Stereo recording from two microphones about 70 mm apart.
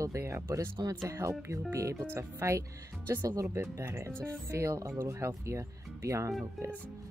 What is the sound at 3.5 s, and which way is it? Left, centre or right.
Speech, right.